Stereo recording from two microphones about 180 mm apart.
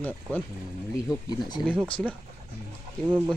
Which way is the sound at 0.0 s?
10° left (ahead or behind).